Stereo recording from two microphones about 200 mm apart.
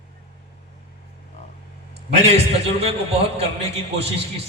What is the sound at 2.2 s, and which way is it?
A man's voice, 30° right (ahead or behind).